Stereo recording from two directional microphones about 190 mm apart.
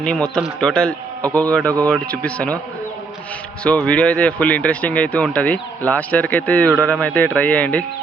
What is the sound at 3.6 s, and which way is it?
Speech, 5° left (ahead or behind).